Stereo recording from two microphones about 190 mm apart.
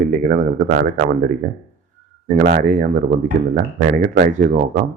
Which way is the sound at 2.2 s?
40° right (ahead or behind).